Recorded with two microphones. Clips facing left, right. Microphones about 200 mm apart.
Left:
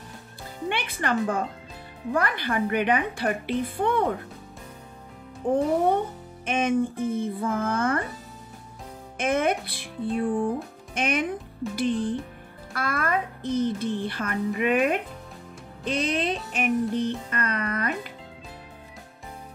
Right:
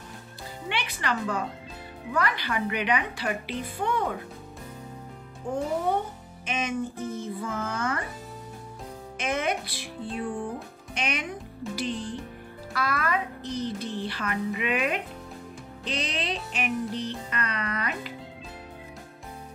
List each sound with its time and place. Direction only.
0.7 s music: 50° left (ahead or behind)
5.4 s a child's voice: 55° left (ahead or behind)
9.2 s music: 55° left (ahead or behind)
11.0 s a child's voice: 50° left (ahead or behind)
12.7 s music: 50° left (ahead or behind)